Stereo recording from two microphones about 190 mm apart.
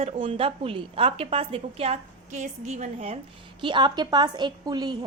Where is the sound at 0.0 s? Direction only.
30° right (ahead or behind).